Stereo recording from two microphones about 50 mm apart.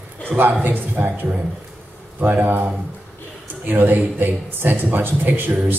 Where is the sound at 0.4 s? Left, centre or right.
Right.